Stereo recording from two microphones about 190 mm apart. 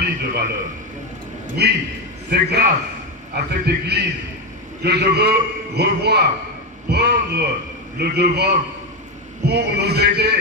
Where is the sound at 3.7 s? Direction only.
60° right (ahead or behind).